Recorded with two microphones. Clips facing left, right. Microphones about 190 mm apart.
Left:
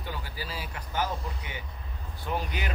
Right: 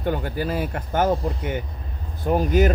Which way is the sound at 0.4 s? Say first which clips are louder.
Right 13 dB; 55° right (ahead or behind).